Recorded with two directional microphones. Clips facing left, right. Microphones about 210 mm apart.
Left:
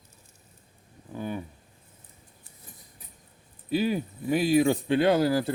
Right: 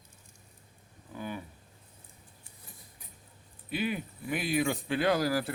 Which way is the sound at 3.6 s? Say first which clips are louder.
Left 7 dB; 35° left (ahead or behind).